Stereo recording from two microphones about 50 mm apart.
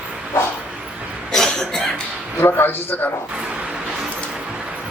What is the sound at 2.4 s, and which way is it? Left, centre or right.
Speech, left.